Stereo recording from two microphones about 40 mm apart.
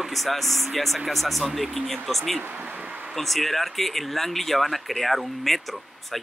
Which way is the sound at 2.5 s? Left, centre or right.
Right.